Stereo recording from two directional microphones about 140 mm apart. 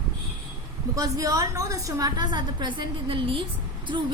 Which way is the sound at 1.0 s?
25° right (ahead or behind).